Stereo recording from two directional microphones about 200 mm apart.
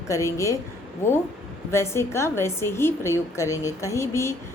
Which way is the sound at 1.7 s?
15° left (ahead or behind).